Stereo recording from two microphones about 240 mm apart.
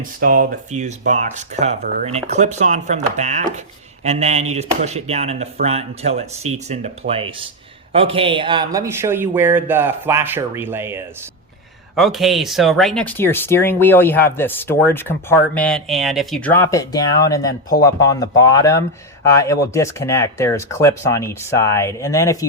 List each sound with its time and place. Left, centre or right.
0.0 s speech: right; by 22.4 s centre